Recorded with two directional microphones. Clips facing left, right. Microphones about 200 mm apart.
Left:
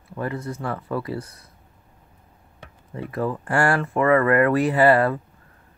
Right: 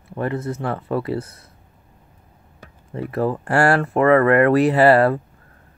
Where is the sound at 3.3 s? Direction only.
40° right (ahead or behind).